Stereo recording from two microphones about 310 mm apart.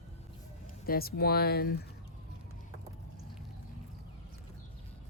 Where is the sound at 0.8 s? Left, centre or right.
Left.